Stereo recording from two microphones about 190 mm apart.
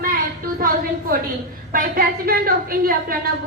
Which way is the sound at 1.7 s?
45° right (ahead or behind).